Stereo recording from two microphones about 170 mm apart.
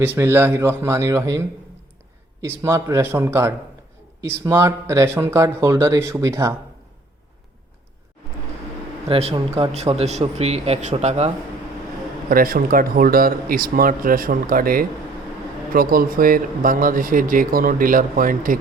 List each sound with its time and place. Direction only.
0.0 s speech: 10° right (ahead or behind)
9.0 s speech: 35° right (ahead or behind)
12.3 s speech: 60° right (ahead or behind)